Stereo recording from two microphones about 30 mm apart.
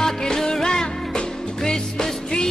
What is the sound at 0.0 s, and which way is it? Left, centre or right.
Music, left.